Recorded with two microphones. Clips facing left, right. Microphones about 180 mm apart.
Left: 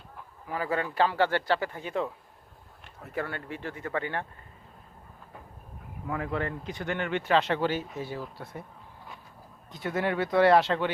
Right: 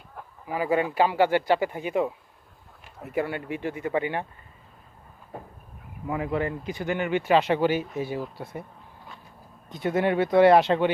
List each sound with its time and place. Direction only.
0.4 s speech: 10° right (ahead or behind)
6.1 s speech: 10° right (ahead or behind)
9.6 s speech: 20° right (ahead or behind)